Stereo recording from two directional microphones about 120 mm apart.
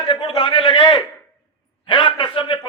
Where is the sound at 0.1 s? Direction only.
45° left (ahead or behind).